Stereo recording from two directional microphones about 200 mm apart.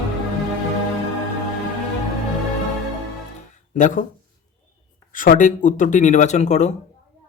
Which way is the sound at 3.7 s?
40° left (ahead or behind).